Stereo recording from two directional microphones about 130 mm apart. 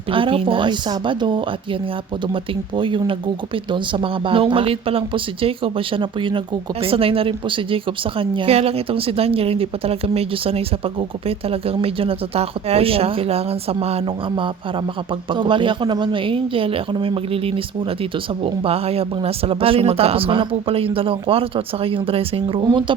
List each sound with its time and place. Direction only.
0.1 s speech: 40° right (ahead or behind)